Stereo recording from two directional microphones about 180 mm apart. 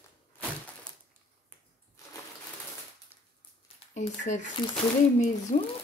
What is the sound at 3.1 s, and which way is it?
Crushing, 10° right (ahead or behind).